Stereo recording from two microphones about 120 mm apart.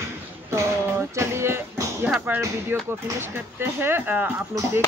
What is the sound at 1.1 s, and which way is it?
Speech, 25° right (ahead or behind).